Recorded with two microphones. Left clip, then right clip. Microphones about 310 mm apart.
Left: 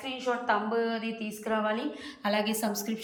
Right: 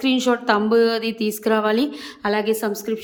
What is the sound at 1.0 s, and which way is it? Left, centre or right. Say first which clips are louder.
Speech: right 12 dB; centre.